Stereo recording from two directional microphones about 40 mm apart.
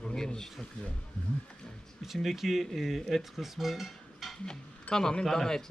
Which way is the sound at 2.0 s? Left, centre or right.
Centre.